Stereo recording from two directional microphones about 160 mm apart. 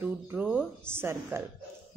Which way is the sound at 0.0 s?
10° right (ahead or behind).